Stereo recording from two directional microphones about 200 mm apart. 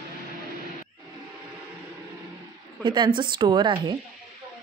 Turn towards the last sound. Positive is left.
turn(degrees=-20)  # may be behind; listen again after turning